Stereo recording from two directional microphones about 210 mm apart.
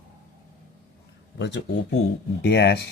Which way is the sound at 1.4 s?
55° left (ahead or behind).